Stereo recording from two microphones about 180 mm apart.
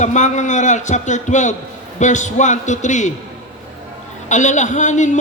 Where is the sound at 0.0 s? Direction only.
40° left (ahead or behind).